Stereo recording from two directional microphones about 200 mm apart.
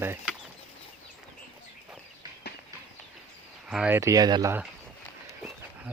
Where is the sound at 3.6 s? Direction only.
5° right (ahead or behind).